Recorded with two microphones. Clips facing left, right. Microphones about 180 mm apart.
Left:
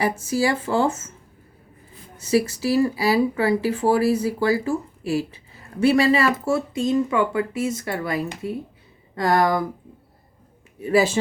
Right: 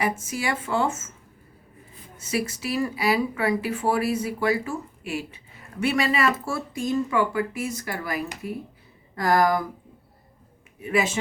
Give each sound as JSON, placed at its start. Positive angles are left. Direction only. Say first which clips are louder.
{"t": 0.0, "sound": "speech", "louder": "left 5 dB", "side_deg": 35}
{"t": 2.2, "sound": "speech", "louder": "left 7 dB", "side_deg": 35}
{"t": 10.8, "sound": "speech", "louder": "left 6 dB", "side_deg": 35}